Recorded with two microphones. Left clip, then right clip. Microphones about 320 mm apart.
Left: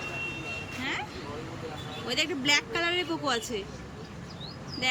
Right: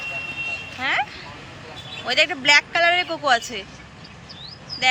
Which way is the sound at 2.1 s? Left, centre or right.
Centre.